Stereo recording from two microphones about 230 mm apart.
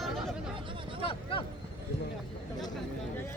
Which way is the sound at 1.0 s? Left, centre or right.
Left.